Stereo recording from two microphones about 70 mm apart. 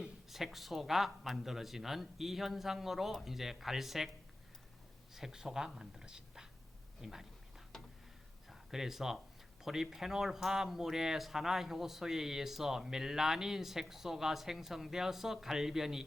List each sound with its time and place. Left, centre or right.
0.0 s speech: centre
5.1 s speech: centre
7.7 s a sound: centre
8.4 s speech: centre